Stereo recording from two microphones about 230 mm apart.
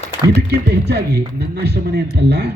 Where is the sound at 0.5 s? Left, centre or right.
Right.